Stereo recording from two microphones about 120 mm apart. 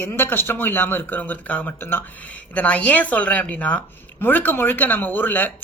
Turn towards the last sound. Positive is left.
turn(degrees=15)  # may be behind; listen again after turning